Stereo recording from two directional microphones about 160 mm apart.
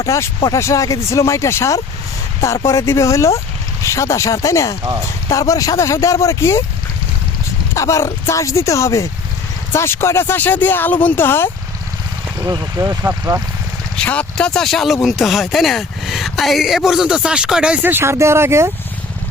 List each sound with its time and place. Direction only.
0.0 s speech: 20° left (ahead or behind)
7.8 s speech: 20° left (ahead or behind)
12.4 s speech: 20° right (ahead or behind)
13.9 s speech: 5° left (ahead or behind); by 18.7 s 15° right (ahead or behind)